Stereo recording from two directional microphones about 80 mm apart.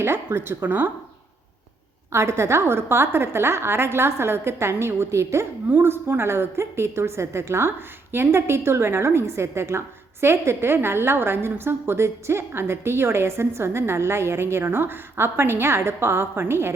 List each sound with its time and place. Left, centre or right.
0.0 s a woman's voice: right
2.1 s a woman's voice: right